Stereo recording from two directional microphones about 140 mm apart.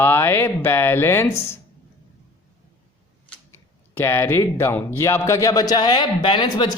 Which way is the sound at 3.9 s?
15° left (ahead or behind).